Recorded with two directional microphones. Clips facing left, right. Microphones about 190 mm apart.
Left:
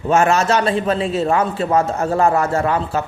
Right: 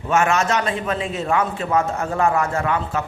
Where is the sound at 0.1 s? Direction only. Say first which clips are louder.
Left 4 dB; 35° left (ahead or behind).